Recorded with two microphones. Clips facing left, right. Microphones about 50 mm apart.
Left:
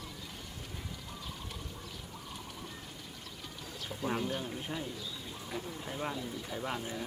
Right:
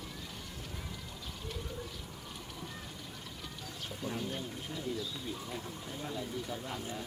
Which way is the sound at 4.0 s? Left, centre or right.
Left.